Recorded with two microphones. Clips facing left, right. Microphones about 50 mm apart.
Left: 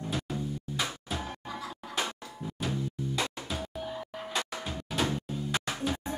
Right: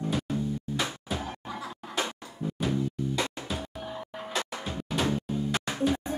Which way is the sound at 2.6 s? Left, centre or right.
Centre.